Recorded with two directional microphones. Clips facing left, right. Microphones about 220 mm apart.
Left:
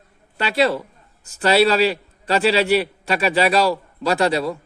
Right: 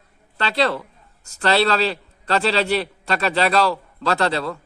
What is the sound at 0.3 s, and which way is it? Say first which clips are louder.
A man's voice: left 2 dB; 10° left (ahead or behind).